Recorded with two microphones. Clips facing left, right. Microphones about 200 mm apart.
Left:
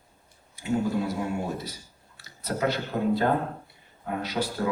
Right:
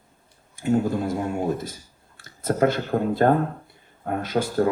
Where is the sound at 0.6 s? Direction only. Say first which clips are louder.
Right 4 dB; 50° right (ahead or behind).